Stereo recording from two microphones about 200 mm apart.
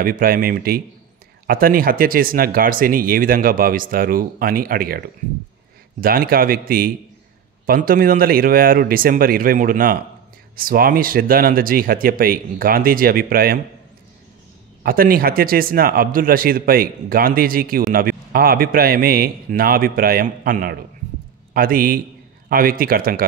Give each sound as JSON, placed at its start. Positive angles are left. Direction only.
{"t": 0.0, "sound": "speech", "side_deg": -45}
{"t": 14.8, "sound": "speech", "side_deg": -45}